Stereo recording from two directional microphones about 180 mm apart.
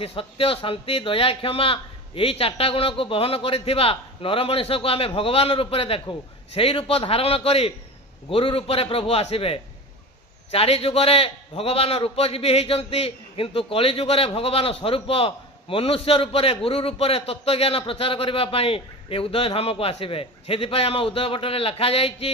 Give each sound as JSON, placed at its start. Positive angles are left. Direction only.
{"t": 0.0, "sound": "a man's voice", "side_deg": 30}